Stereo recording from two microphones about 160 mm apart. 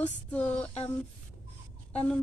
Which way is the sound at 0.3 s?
10° left (ahead or behind).